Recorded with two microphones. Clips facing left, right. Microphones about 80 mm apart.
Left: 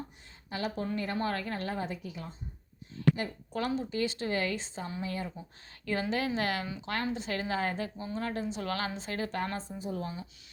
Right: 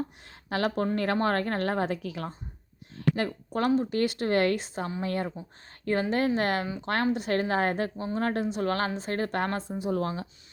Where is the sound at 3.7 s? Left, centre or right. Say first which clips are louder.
Right 6 dB; right.